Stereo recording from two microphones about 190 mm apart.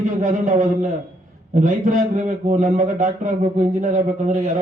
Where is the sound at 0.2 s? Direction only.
40° right (ahead or behind).